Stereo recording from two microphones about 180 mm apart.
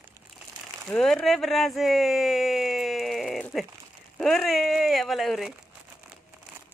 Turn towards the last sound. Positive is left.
turn(degrees=0)  # may be behind; listen again after turning